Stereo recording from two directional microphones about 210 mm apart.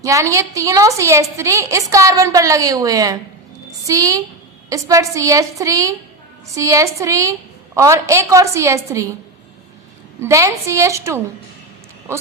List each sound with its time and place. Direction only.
0.0 s a woman's voice: 15° right (ahead or behind)
10.2 s a woman's voice: 15° right (ahead or behind)